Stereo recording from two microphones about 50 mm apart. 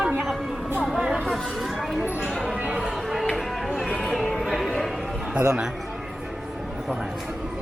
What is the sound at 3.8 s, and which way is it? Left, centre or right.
Music, centre.